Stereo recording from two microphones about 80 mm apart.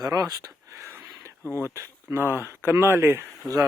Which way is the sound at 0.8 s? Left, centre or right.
Right.